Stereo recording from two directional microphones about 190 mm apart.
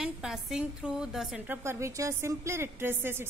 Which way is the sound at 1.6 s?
15° right (ahead or behind).